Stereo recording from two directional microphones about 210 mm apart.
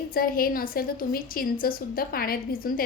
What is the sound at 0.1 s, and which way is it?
A woman's voice, 45° left (ahead or behind).